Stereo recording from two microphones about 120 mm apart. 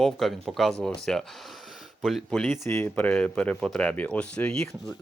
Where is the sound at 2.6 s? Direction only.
20° left (ahead or behind).